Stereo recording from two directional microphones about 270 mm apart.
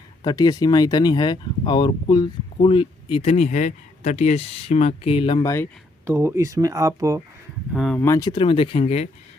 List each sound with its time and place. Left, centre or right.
0.2 s speech: centre
6.1 s speech: centre
7.7 s speech: centre; by 9.0 s left